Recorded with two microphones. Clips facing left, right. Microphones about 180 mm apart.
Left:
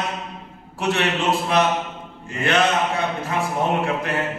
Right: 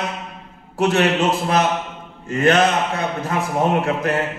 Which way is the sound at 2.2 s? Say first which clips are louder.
Right 4 dB; 40° right (ahead or behind).